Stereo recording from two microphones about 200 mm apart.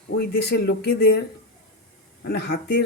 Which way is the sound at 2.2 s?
50° left (ahead or behind).